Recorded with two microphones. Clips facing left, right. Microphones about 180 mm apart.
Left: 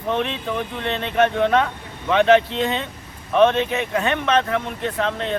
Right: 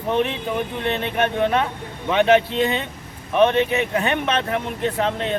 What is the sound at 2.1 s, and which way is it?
Speech, 15° right (ahead or behind).